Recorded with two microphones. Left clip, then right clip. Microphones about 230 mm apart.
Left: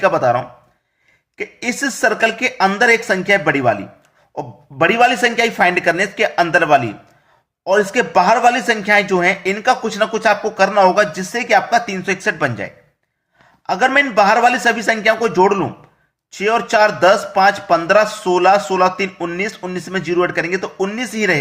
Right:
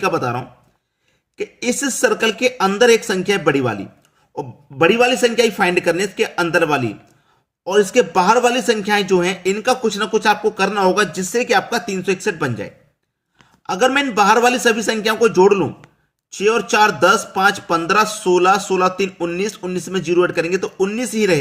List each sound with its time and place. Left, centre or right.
0.0 s a man's voice: centre
1.6 s a man's voice: right